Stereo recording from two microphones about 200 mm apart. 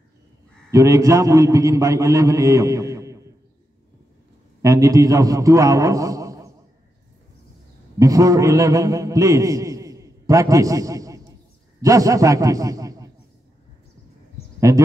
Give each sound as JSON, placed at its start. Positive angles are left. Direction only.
{"t": 0.7, "sound": "a man's voice", "side_deg": -15}
{"t": 4.6, "sound": "a man's voice", "side_deg": -15}
{"t": 8.0, "sound": "a man's voice", "side_deg": -15}
{"t": 14.7, "sound": "a man's voice", "side_deg": -15}